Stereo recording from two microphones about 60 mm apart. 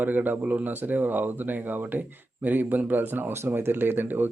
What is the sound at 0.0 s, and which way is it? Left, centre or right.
Speech, right.